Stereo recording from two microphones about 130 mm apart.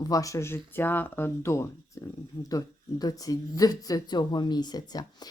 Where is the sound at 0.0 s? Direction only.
25° left (ahead or behind).